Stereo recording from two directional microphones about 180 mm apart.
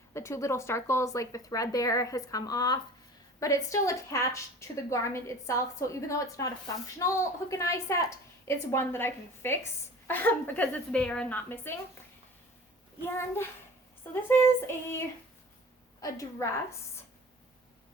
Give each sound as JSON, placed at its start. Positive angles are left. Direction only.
{"t": 0.1, "sound": "a woman's voice", "side_deg": 15}
{"t": 13.1, "sound": "a woman's voice", "side_deg": 15}